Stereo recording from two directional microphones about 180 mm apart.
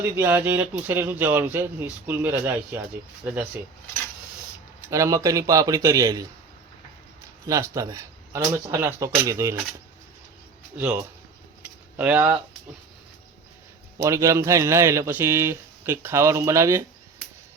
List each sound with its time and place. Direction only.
0.2 s speech: 10° right (ahead or behind)
4.9 s a man's voice: 15° right (ahead or behind)
7.4 s speech: 20° right (ahead or behind)
10.8 s speech: 10° right (ahead or behind)
14.0 s speech: 15° right (ahead or behind)